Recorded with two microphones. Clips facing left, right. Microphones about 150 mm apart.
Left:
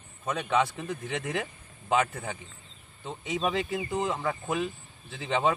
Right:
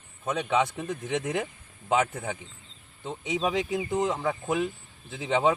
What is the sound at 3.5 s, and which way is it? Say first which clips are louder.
Speech: right 2 dB; 10° right (ahead or behind).